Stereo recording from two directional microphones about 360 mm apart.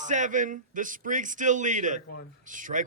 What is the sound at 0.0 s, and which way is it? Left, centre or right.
Speech, centre.